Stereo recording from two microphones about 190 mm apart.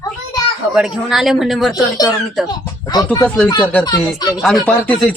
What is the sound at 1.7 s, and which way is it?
Speech, 20° left (ahead or behind).